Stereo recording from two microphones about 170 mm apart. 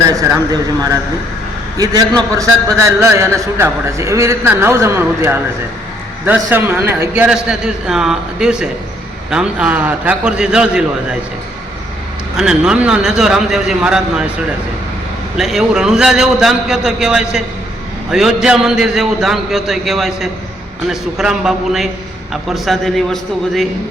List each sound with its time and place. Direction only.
1.8 s a man's voice: 25° right (ahead or behind)
6.4 s a man's voice: 15° right (ahead or behind)
12.4 s a man's voice: 5° right (ahead or behind)
15.4 s a man's voice: centre (ahead or behind)